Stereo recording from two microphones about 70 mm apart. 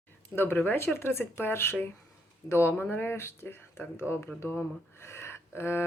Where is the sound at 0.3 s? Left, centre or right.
Left.